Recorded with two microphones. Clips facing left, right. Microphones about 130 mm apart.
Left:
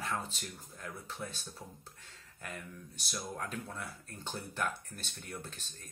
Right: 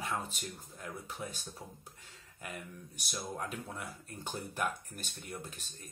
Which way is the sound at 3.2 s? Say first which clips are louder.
Right 1 dB; 10° right (ahead or behind).